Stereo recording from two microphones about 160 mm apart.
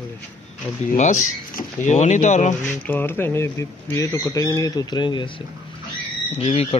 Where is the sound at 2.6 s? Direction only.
10° left (ahead or behind).